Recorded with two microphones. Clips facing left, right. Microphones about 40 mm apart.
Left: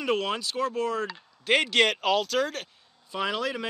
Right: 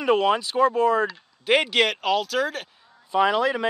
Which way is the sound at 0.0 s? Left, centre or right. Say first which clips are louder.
Right 7 dB; centre.